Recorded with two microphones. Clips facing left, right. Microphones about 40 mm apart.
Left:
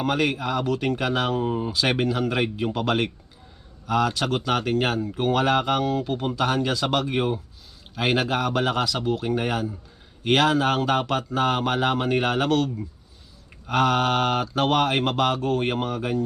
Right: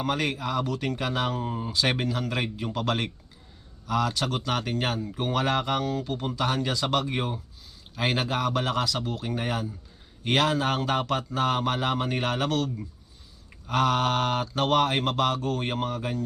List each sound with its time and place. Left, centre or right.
0.0 s speech: centre